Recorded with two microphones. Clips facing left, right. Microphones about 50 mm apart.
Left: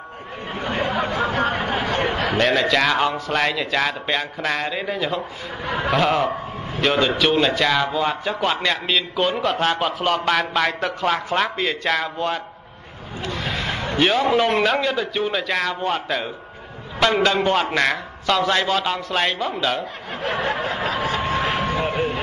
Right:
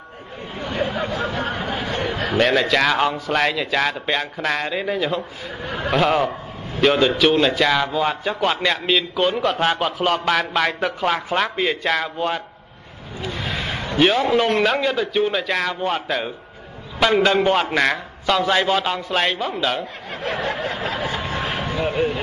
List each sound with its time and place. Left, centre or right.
0.6 s a sound: left
2.3 s a man's voice: centre
5.6 s a man's voice: left
5.9 s a man's voice: centre
13.2 s a sound: centre
13.9 s a man's voice: centre
20.2 s a man's voice: left
20.4 s a sound: left
21.2 s vehicle: left